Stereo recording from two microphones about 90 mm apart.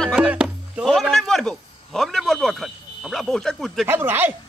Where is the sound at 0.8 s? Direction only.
5° left (ahead or behind).